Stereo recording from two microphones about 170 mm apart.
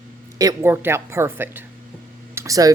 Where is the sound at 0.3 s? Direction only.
15° right (ahead or behind).